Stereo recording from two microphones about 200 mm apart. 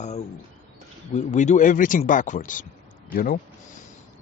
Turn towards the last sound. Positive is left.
turn(degrees=50)  # may be behind; listen again after turning